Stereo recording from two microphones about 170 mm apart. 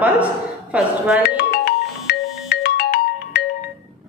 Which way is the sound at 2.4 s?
65° left (ahead or behind).